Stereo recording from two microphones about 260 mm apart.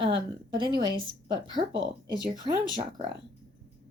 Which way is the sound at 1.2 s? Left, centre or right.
Centre.